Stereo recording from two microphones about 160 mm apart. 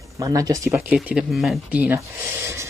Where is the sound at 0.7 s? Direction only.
5° right (ahead or behind).